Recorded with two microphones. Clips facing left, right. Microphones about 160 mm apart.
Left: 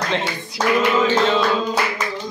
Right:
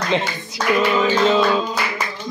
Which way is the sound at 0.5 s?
Centre (ahead or behind).